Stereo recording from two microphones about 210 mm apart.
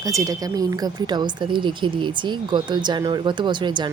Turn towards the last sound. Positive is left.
turn(degrees=-20)  # may be behind; listen again after turning